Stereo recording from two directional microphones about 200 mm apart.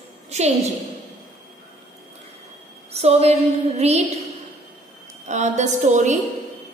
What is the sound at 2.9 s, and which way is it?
A woman's voice, 30° right (ahead or behind).